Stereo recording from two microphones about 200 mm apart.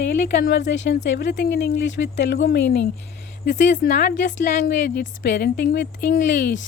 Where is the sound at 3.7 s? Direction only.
40° left (ahead or behind).